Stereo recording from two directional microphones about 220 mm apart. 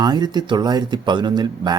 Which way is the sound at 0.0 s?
20° right (ahead or behind).